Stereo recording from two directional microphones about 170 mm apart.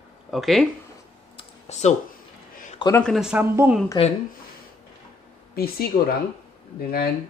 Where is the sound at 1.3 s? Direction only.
40° left (ahead or behind).